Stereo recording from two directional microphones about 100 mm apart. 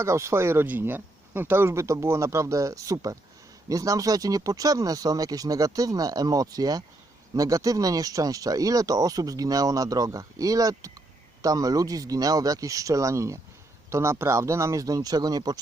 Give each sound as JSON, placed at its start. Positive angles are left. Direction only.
{"t": 0.0, "sound": "speech", "side_deg": -30}